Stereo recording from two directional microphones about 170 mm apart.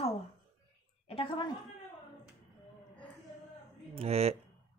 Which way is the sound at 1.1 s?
35° left (ahead or behind).